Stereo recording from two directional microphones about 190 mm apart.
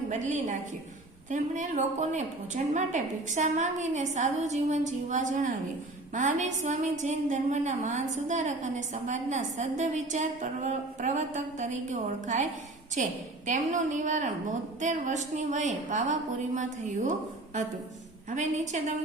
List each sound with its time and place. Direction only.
0.1 s a woman's voice: 40° right (ahead or behind)